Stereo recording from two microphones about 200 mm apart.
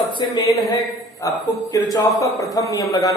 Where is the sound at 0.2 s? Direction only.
20° left (ahead or behind).